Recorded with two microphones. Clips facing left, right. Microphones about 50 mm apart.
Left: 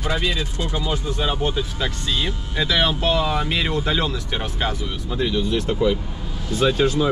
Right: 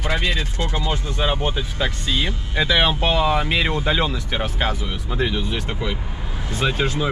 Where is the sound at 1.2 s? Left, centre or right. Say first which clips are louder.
Right 2 dB; centre.